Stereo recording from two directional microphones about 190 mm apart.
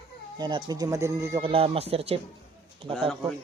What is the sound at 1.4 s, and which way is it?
Speech, 30° right (ahead or behind).